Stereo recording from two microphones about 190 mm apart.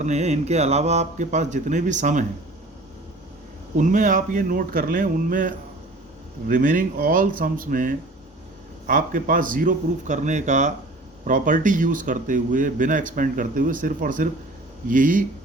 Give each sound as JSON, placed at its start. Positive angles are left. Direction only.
{"t": 0.0, "sound": "speech", "side_deg": -35}
{"t": 3.8, "sound": "a man's voice", "side_deg": -45}